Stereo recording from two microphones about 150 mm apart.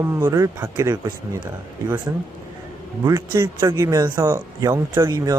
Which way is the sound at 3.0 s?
25° right (ahead or behind).